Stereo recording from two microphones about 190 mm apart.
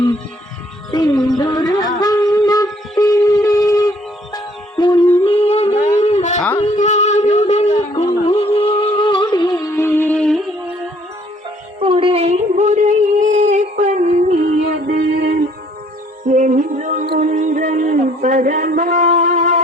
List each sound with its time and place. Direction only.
0.9 s music: 20° left (ahead or behind)
1.4 s a sound: 20° left (ahead or behind)
2.0 s wind instrument: 20° left (ahead or behind)
3.0 s music: 20° left (ahead or behind)
11.8 s a sound: 30° right (ahead or behind)
15.1 s music: 55° right (ahead or behind)
16.2 s music: 40° right (ahead or behind)